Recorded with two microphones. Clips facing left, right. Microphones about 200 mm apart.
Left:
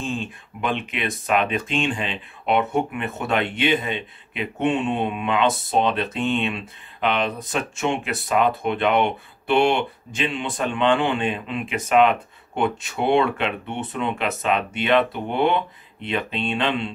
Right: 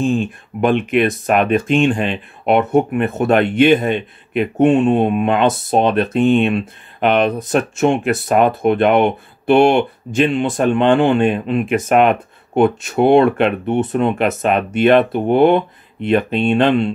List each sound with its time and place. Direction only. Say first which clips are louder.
0.0 s speech: right 11 dB; 45° right (ahead or behind)